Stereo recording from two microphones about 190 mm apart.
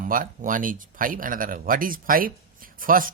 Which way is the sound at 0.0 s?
45° right (ahead or behind).